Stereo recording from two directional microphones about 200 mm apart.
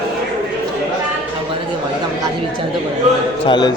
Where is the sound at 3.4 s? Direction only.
20° left (ahead or behind).